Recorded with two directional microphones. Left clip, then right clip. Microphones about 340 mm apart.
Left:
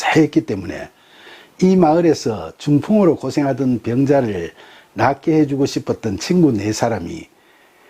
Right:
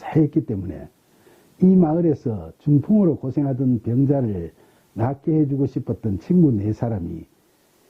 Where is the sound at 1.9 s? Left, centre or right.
Centre.